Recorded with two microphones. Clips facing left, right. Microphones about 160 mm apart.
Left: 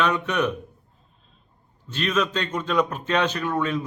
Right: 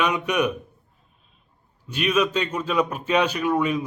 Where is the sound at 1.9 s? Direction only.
10° right (ahead or behind).